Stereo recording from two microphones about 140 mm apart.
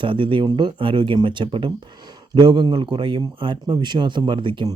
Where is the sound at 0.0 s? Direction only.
35° right (ahead or behind).